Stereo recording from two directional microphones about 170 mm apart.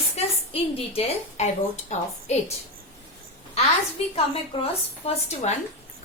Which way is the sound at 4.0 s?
35° left (ahead or behind).